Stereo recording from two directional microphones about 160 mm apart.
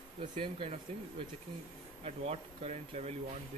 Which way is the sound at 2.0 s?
40° right (ahead or behind).